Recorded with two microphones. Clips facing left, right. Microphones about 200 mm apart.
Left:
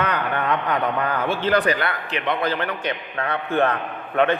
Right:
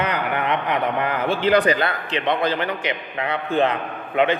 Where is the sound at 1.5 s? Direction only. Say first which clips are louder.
Right 3 dB; 20° right (ahead or behind).